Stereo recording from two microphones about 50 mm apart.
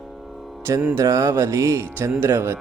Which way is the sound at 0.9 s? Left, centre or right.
Right.